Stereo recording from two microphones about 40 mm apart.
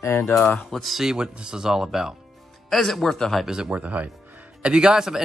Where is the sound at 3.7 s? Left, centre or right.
Right.